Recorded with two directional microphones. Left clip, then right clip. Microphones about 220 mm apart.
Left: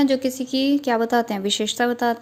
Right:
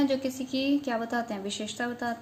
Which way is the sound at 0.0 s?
35° left (ahead or behind).